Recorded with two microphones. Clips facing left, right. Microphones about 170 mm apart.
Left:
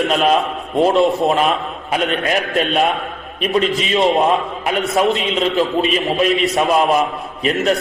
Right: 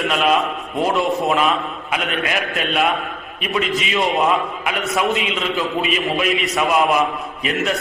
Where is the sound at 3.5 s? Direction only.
35° left (ahead or behind).